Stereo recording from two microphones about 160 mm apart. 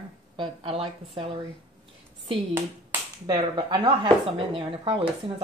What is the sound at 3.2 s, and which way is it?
Speech, 25° right (ahead or behind).